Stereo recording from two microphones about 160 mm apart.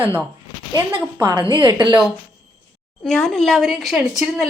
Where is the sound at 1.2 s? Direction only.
25° right (ahead or behind).